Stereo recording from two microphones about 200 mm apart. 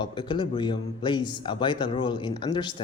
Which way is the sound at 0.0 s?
25° left (ahead or behind).